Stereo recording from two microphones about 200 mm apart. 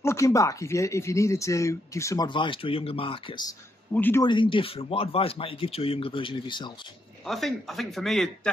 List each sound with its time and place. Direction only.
0.0 s speech: 15° left (ahead or behind)
3.9 s speech: 10° left (ahead or behind)
4.3 s speech: 25° left (ahead or behind)
7.2 s a man's voice: centre (ahead or behind)